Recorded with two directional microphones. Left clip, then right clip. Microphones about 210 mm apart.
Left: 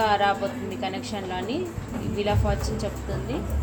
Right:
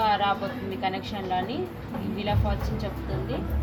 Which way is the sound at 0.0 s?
55° left (ahead or behind).